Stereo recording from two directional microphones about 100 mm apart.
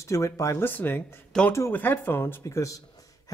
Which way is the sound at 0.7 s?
20° left (ahead or behind).